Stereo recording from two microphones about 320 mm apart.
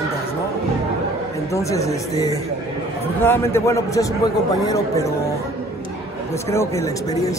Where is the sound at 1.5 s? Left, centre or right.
Centre.